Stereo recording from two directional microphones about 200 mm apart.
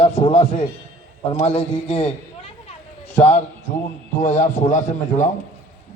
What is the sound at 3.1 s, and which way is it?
A man's voice, 35° left (ahead or behind).